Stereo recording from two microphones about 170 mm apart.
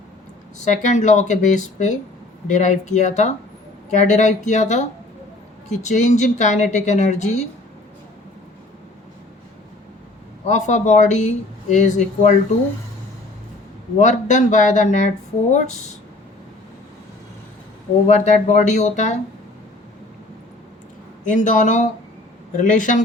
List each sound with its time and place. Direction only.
0.6 s speech: 45° left (ahead or behind)
10.4 s speech: 45° left (ahead or behind)
14.0 s speech: 45° left (ahead or behind)
18.1 s speech: 40° left (ahead or behind)
21.2 s speech: 50° left (ahead or behind)